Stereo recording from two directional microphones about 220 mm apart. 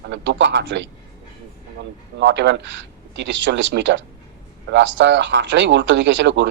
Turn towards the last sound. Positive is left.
turn(degrees=-55)  # may be behind; listen again after turning